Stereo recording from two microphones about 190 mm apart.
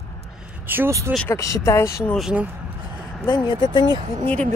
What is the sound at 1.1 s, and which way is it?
Speech, 10° left (ahead or behind).